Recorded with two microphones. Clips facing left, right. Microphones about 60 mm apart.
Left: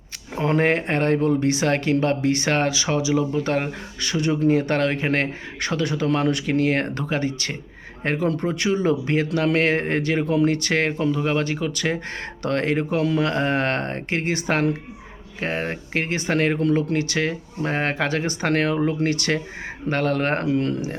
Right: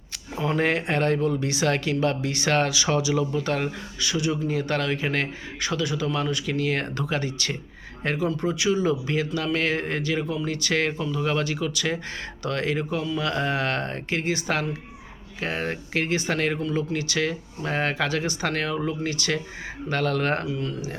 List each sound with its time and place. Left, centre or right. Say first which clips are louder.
0.3 s speech: left 4 dB; left
4.0 s speech: left 5 dB; left
13.2 s speech: left 4 dB; left
15.4 s speech: left 2 dB; left
19.9 s speech: left 2 dB; left
20.5 s speech: left 7 dB; left